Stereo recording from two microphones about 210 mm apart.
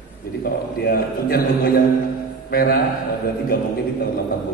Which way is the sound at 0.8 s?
45° left (ahead or behind).